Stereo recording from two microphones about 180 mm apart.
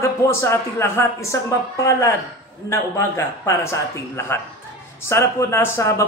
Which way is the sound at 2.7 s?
15° left (ahead or behind).